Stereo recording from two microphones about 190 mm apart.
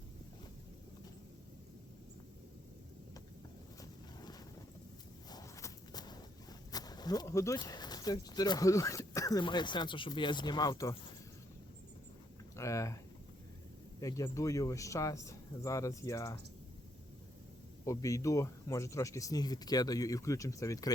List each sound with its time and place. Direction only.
3.8 s a sound: 20° left (ahead or behind)
5.3 s walk: 15° left (ahead or behind)
6.7 s speech: 20° left (ahead or behind)
12.5 s speech: 15° left (ahead or behind)
14.0 s speech: 15° left (ahead or behind)
17.8 s speech: 15° left (ahead or behind)